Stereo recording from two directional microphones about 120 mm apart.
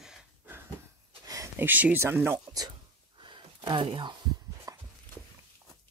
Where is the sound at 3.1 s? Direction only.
40° right (ahead or behind).